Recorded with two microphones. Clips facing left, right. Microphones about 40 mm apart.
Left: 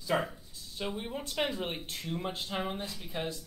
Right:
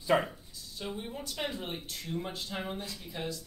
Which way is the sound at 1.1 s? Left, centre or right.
Left.